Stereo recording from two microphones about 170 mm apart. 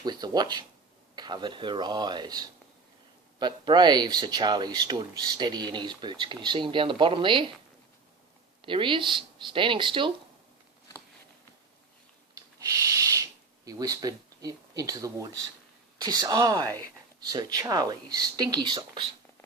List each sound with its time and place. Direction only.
0.0 s speech: 25° right (ahead or behind)
8.6 s speech: 30° right (ahead or behind)
12.3 s a sound: 20° right (ahead or behind)
13.7 s speech: 20° right (ahead or behind)